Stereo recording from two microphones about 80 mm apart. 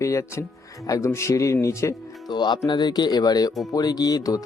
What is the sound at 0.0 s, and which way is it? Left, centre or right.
Speech, left.